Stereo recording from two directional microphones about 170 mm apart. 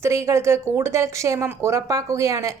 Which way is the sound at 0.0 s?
15° right (ahead or behind).